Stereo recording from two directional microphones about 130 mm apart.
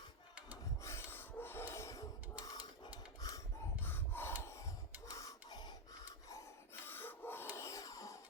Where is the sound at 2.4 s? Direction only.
30° left (ahead or behind).